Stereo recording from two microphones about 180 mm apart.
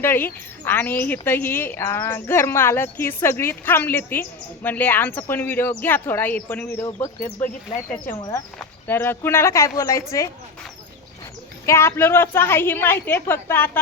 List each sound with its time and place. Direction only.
0.0 s speech: 10° left (ahead or behind)
7.7 s speech: 25° left (ahead or behind)
11.6 s speech: 15° left (ahead or behind)